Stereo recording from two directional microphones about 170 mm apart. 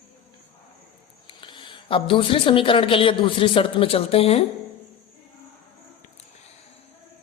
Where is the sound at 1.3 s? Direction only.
30° left (ahead or behind).